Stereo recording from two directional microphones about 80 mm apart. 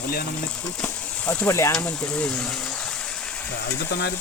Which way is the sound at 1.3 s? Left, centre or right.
Left.